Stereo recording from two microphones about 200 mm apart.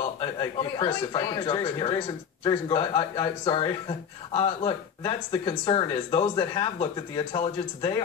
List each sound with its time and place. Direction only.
0.2 s speech: 20° left (ahead or behind)